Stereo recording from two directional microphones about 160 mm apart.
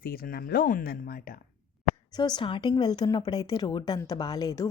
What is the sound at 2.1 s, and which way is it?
A woman's voice, 25° left (ahead or behind).